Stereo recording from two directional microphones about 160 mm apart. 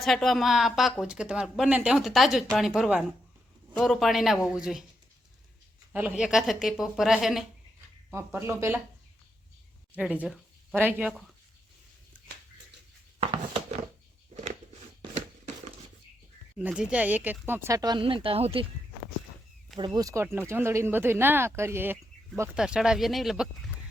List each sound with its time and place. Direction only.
0.0 s a woman's voice: centre (ahead or behind)
5.9 s a woman's voice: 10° right (ahead or behind)
8.1 s speech: 15° right (ahead or behind)
9.9 s a sound: 10° right (ahead or behind)
10.8 s speech: 10° right (ahead or behind)
13.1 s a sound: 35° right (ahead or behind)
15.1 s a sound: 45° right (ahead or behind)
16.6 s speech: 5° right (ahead or behind); by 18.6 s 35° right (ahead or behind)
19.8 s a woman's voice: 25° right (ahead or behind); by 23.5 s centre (ahead or behind)